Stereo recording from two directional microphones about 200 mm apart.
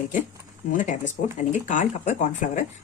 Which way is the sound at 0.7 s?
40° left (ahead or behind).